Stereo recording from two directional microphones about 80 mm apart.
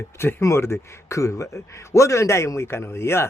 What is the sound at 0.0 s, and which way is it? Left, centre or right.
A man's voice, left.